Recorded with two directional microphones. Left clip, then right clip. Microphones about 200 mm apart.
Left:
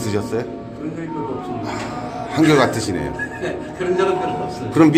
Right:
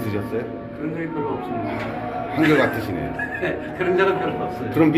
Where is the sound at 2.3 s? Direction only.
30° left (ahead or behind).